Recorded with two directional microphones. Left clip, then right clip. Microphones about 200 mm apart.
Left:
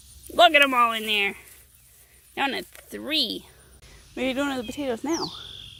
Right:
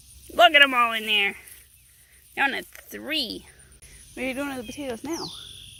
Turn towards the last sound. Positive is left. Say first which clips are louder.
# left 4 dB
turn(degrees=0)  # may be behind; listen again after turning